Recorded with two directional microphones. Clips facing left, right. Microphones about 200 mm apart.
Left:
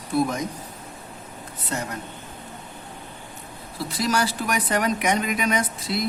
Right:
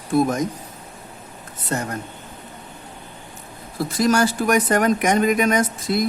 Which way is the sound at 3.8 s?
50° right (ahead or behind).